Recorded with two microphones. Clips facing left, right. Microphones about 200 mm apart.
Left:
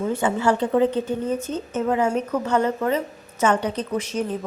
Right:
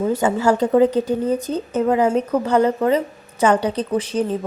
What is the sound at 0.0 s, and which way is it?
A woman's voice, 40° right (ahead or behind).